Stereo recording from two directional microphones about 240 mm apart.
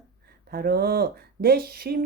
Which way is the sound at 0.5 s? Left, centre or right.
Right.